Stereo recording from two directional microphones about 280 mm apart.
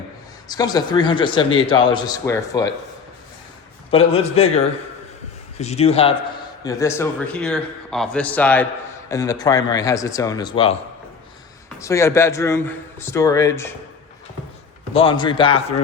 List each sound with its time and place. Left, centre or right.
0.4 s a man's voice: centre
3.9 s a man's voice: left
6.7 s a man's voice: centre
11.8 s a man's voice: centre
14.9 s a man's voice: centre